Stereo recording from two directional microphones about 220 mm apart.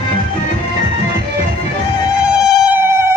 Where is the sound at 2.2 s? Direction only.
5° right (ahead or behind).